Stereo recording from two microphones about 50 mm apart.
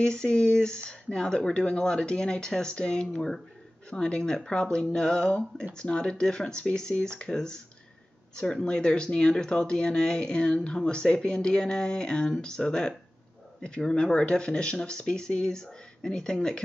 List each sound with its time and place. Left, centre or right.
0.0 s speech: centre